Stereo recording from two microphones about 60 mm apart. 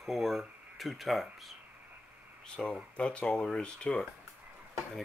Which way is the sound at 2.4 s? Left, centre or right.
Centre.